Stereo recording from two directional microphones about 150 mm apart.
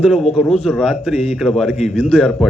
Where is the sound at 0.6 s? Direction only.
5° right (ahead or behind).